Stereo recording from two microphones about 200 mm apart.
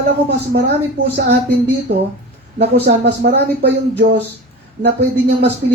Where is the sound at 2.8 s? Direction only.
55° right (ahead or behind).